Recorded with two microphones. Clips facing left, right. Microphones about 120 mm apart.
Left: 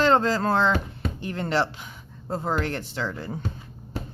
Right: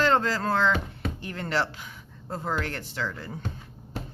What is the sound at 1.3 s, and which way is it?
Speech, 25° left (ahead or behind).